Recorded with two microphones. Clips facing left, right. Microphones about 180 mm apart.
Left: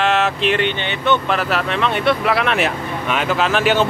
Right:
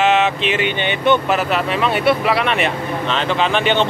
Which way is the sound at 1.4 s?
Centre (ahead or behind).